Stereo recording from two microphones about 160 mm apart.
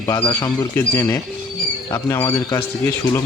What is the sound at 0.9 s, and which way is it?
A man's voice, 15° left (ahead or behind).